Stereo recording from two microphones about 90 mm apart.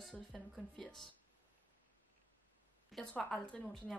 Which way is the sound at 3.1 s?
10° left (ahead or behind).